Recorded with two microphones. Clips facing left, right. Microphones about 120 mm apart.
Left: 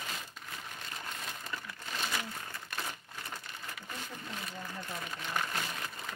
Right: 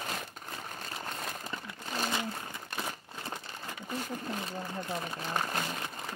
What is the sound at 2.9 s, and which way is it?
Crumpling, 30° right (ahead or behind).